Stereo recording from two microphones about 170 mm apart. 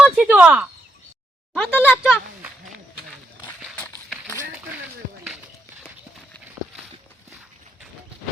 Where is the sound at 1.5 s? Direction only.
10° left (ahead or behind).